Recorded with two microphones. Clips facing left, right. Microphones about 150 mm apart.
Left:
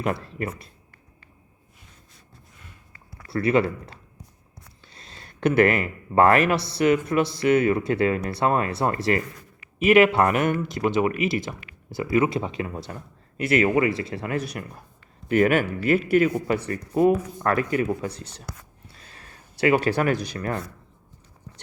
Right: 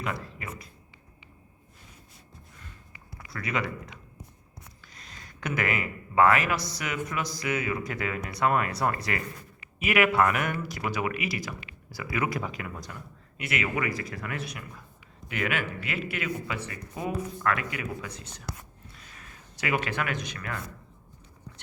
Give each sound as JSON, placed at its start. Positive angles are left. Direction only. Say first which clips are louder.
{"t": 3.3, "sound": "speech", "louder": "left 11 dB", "side_deg": 30}
{"t": 4.9, "sound": "a sound", "louder": "left 5 dB", "side_deg": 30}
{"t": 5.5, "sound": "speech", "louder": "left 10 dB", "side_deg": 55}
{"t": 6.5, "sound": "a man's voice", "louder": "left 11 dB", "side_deg": 30}